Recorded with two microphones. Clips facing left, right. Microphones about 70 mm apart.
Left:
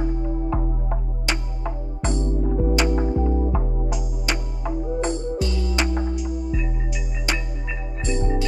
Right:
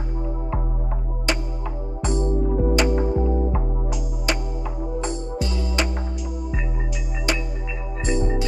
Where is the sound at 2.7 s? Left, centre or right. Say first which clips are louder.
Right 1 dB; right.